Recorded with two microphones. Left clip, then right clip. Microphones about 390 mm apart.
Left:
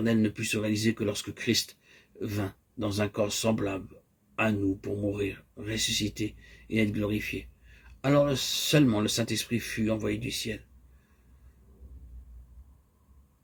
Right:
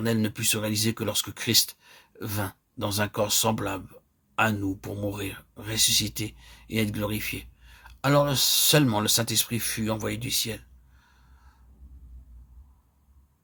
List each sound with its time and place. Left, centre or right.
0.0 s speech: right